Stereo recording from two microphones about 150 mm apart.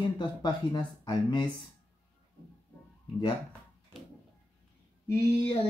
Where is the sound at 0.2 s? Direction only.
30° left (ahead or behind).